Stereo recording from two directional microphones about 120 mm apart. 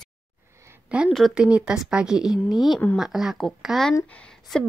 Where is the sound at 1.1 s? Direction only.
5° right (ahead or behind).